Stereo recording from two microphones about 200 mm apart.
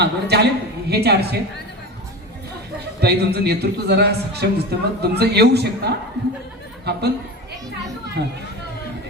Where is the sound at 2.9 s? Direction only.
55° right (ahead or behind).